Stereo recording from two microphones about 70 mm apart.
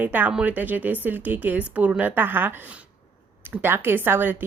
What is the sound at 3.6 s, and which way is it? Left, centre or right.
Speech, right.